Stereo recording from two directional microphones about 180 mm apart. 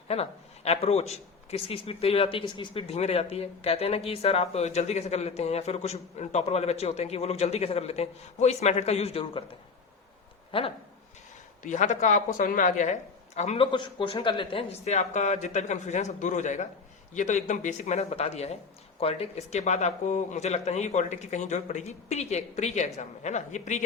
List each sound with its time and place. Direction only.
0.1 s speech: 35° left (ahead or behind)
10.5 s speech: 30° left (ahead or behind)
11.6 s speech: 40° left (ahead or behind)